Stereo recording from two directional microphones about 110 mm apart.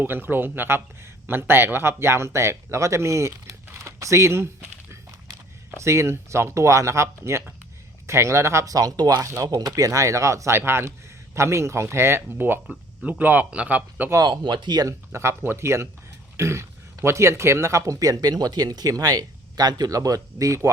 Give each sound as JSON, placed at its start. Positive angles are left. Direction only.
{"t": 0.0, "sound": "a man's voice", "side_deg": -20}
{"t": 14.3, "sound": "speech", "side_deg": -45}
{"t": 14.8, "sound": "speech", "side_deg": -25}